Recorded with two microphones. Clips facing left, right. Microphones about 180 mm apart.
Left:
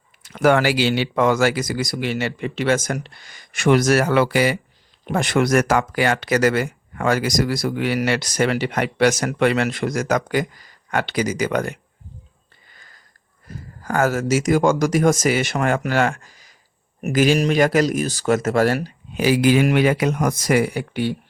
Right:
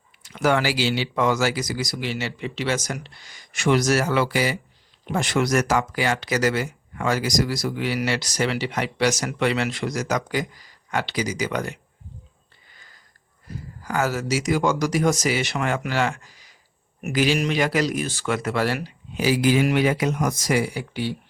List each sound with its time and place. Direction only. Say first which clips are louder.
0.2 s speech: left 5 dB; 55° left (ahead or behind)
13.8 s speech: left 5 dB; 50° left (ahead or behind)